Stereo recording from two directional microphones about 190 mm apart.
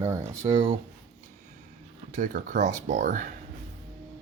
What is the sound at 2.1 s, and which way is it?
Speech, 45° right (ahead or behind).